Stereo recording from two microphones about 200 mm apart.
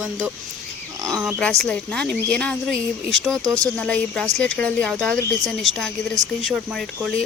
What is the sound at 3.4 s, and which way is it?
Speech, 15° right (ahead or behind).